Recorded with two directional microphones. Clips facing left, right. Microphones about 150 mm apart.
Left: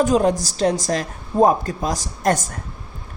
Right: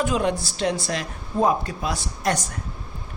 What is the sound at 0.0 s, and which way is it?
A woman's voice, 40° left (ahead or behind).